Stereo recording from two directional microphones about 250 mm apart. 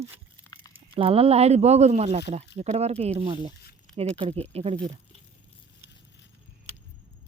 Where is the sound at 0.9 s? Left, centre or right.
Right.